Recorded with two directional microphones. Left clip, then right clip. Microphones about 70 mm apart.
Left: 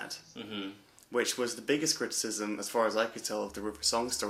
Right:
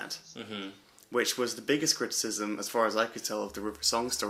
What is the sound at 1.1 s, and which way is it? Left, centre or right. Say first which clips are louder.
Speech: right 2 dB; right.